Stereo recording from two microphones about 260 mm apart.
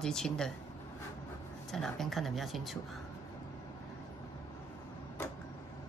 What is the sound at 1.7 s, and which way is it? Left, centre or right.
Speech, centre.